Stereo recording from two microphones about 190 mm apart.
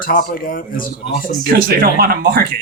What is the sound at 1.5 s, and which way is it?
Speech, 50° right (ahead or behind).